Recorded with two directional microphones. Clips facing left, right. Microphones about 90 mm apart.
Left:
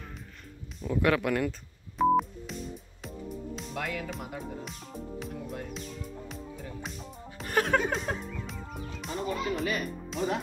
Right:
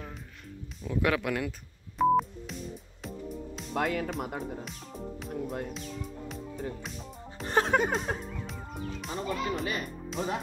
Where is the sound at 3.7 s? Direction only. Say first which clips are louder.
Right 6 dB; 45° right (ahead or behind).